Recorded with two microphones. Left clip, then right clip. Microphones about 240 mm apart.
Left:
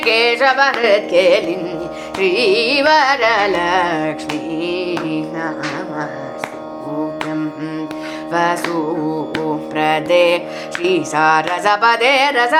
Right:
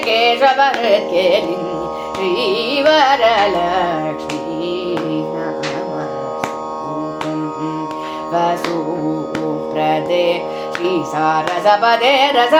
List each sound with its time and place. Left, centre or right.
0.0 s carnatic music: centre
8.3 s music: centre
9.7 s carnatic music: centre